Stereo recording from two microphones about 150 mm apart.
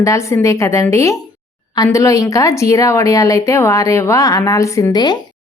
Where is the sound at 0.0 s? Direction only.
20° left (ahead or behind).